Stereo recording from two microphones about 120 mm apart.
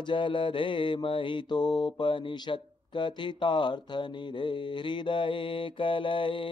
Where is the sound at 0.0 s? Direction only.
45° left (ahead or behind).